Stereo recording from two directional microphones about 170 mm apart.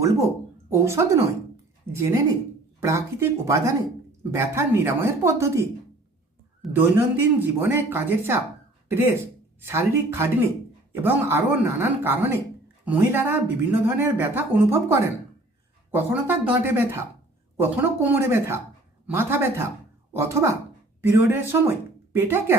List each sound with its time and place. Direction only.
0.7 s a woman's voice: 15° right (ahead or behind)
6.7 s speech: 10° right (ahead or behind)